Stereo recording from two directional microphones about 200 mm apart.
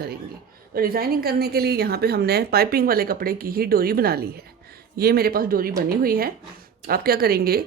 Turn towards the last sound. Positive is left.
turn(degrees=-50)  # may be behind; listen again after turning